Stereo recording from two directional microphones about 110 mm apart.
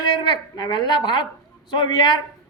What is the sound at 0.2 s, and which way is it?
A woman's voice, 45° left (ahead or behind).